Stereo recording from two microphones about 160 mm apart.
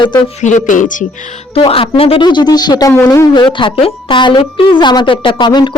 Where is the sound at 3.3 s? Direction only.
30° left (ahead or behind).